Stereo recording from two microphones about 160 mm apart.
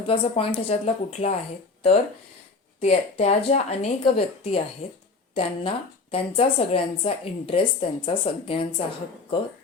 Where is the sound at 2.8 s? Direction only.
40° left (ahead or behind).